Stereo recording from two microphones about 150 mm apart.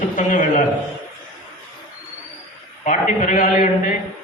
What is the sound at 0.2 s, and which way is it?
Speech, 60° left (ahead or behind).